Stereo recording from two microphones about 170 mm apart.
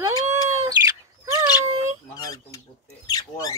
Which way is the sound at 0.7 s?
20° right (ahead or behind).